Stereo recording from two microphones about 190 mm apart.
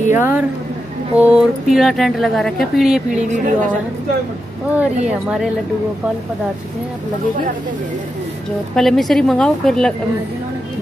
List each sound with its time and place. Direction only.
0.1 s speech: 10° right (ahead or behind)
3.2 s a woman's voice: 40° right (ahead or behind)
4.7 s speech: 5° right (ahead or behind)
8.7 s speech: centre (ahead or behind)